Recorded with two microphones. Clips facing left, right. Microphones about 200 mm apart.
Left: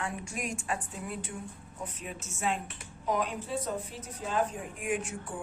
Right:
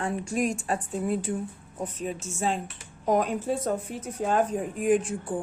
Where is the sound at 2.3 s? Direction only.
35° right (ahead or behind).